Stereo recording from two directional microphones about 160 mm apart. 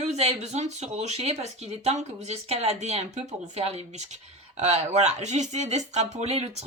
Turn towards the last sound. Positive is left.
turn(degrees=-40)  # may be behind; listen again after turning